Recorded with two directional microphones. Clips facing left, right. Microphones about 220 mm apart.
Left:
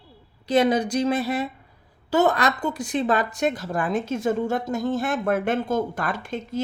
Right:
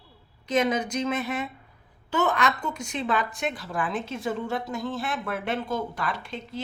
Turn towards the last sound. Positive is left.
turn(degrees=50)  # may be behind; listen again after turning